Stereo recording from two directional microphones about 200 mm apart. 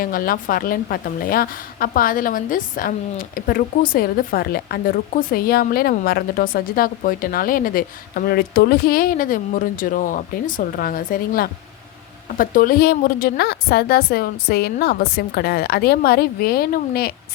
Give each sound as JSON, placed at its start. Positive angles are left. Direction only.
{"t": 0.0, "sound": "a woman's voice", "side_deg": 45}